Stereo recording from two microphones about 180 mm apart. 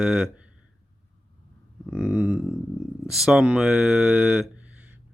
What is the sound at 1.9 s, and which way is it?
Speech, 5° right (ahead or behind).